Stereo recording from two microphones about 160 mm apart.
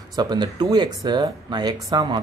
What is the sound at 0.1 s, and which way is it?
Speech, 25° right (ahead or behind).